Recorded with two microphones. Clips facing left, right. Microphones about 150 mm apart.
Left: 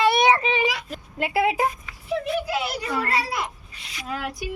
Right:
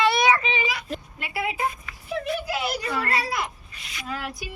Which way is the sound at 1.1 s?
85° left.